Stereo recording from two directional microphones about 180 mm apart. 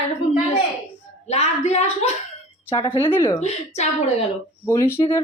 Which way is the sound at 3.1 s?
15° left (ahead or behind).